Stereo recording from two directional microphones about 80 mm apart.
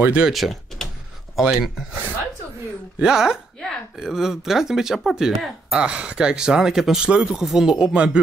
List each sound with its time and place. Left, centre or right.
0.0 s speech: centre
0.3 s speech: centre
3.0 s speech: centre